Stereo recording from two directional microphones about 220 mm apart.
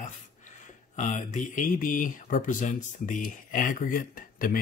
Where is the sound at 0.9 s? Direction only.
35° left (ahead or behind).